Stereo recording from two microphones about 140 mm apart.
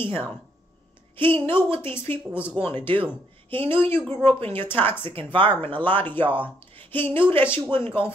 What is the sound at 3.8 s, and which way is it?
A woman's voice, 15° left (ahead or behind).